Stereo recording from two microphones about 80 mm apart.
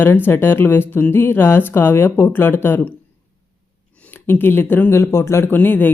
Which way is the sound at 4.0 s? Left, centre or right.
Left.